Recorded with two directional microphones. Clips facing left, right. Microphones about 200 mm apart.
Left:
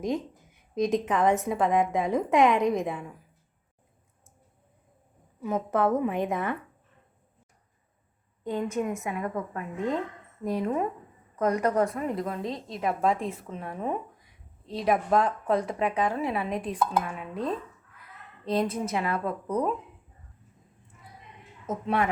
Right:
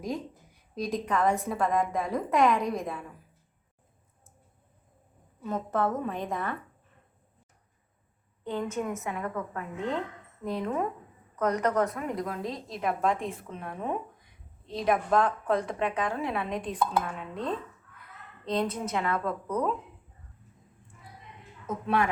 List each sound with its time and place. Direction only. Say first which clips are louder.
0.8 s a woman's voice: left 4 dB; 20° left (ahead or behind)
5.4 s a woman's voice: left 3 dB; 15° left (ahead or behind)
8.7 s a woman's voice: left 3 dB; 15° left (ahead or behind)